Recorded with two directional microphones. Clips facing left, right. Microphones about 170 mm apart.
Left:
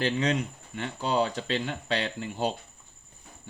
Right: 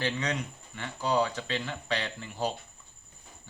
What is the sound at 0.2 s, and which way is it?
Speech, 25° left (ahead or behind).